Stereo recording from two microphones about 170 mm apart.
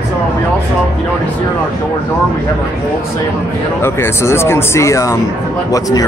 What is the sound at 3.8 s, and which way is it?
A man's voice, 15° left (ahead or behind).